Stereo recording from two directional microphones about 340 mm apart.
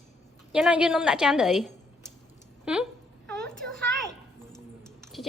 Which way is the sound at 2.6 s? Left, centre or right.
Centre.